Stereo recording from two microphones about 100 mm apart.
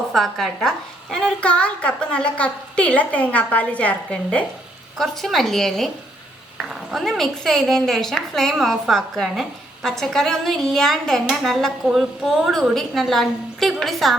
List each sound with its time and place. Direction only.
0.1 s a woman's voice: centre (ahead or behind)
4.9 s a woman's voice: centre (ahead or behind)